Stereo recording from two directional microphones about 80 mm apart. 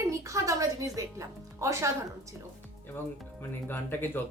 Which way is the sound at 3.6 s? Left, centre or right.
Left.